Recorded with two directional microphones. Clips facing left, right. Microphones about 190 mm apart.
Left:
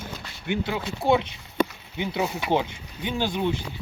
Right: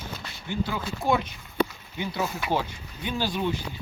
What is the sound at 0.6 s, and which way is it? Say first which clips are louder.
Speech: left 3 dB; 25° left (ahead or behind).